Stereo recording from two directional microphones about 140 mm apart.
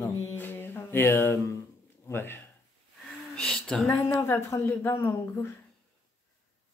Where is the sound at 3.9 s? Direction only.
20° left (ahead or behind).